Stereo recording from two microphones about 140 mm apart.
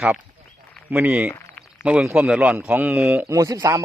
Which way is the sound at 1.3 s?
20° left (ahead or behind).